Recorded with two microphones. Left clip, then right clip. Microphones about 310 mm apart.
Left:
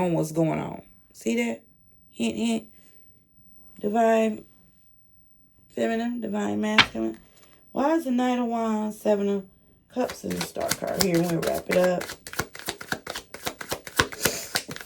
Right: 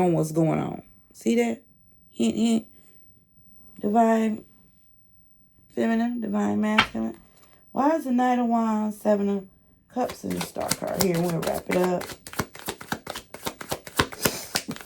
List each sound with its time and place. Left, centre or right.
0.0 s speech: centre
3.8 s speech: centre
5.7 s speech: centre
10.7 s shuffling cards: centre
14.4 s a sound: centre